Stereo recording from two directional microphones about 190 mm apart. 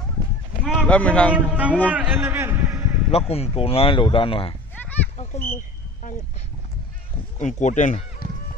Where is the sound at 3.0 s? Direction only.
30° left (ahead or behind).